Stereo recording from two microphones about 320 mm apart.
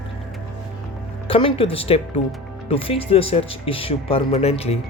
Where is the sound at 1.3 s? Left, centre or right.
Centre.